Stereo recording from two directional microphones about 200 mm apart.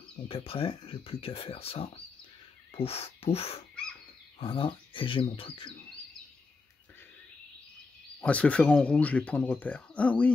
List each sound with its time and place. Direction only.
0.1 s speech: 30° left (ahead or behind)
8.2 s speech: 5° left (ahead or behind)